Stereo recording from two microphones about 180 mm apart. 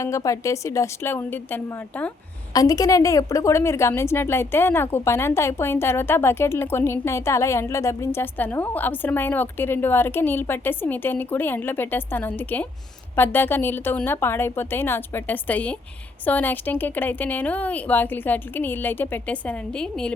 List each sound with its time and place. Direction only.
0.0 s a woman's voice: 15° left (ahead or behind)
2.5 s a woman's voice: 20° left (ahead or behind); by 20.1 s 5° left (ahead or behind)